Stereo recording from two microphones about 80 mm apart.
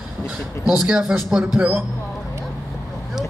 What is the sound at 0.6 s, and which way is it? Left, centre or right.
Speech, centre.